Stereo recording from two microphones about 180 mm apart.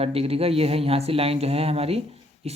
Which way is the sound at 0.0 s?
35° right (ahead or behind).